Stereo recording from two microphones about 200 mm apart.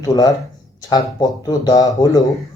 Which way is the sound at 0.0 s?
20° left (ahead or behind).